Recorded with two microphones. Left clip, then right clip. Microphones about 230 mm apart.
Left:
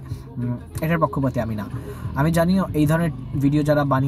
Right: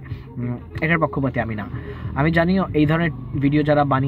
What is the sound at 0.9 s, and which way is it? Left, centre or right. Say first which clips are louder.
Speech: left 1 dB; left.